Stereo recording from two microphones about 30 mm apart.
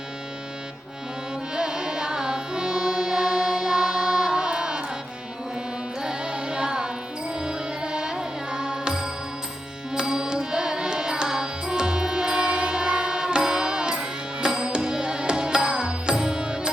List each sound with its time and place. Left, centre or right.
1.5 s carnatic music: right
6.0 s music: right
9.9 s carnatic music: right
14.8 s music: right